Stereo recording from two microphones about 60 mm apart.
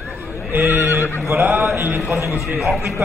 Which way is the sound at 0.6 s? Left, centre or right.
Right.